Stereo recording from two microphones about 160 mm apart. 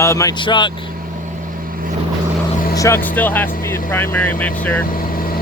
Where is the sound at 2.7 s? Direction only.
15° left (ahead or behind).